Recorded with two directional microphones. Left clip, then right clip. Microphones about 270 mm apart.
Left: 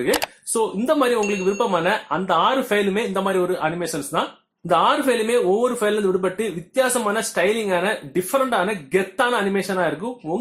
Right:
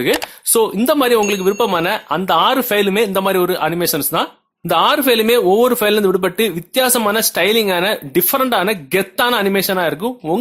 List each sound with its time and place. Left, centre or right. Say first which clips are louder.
0.5 s a man's voice: right 6 dB; right